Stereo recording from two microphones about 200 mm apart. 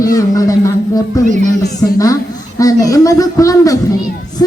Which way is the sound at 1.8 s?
10° left (ahead or behind).